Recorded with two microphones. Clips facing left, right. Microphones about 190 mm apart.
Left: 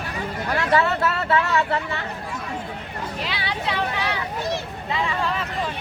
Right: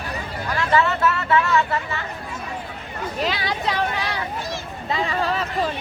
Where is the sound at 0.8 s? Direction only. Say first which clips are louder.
Right 1 dB; 65° left (ahead or behind).